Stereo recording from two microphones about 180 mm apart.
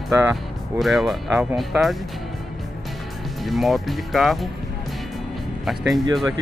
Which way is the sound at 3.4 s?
Centre (ahead or behind).